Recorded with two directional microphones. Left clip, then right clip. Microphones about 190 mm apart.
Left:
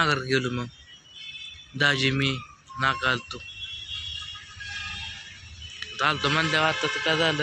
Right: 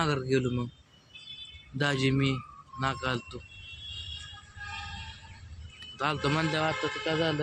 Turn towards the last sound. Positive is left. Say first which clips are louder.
# left 6 dB
turn(degrees=10)  # may be behind; listen again after turning